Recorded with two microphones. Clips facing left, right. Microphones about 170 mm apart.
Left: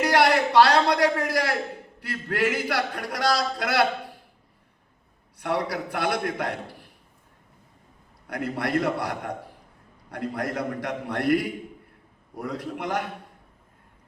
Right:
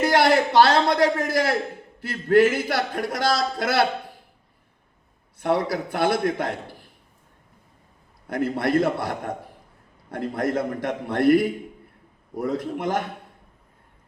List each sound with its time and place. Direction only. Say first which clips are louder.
0.0 s a man's voice: right 2 dB; 25° right (ahead or behind)
5.4 s a man's voice: right 4 dB; 25° right (ahead or behind)
8.3 s a man's voice: right 4 dB; 25° right (ahead or behind)